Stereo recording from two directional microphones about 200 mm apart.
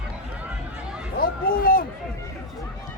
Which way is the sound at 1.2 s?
45° left (ahead or behind).